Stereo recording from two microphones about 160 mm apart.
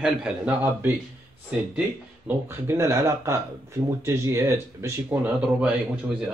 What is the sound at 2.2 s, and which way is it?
Speech, 15° right (ahead or behind).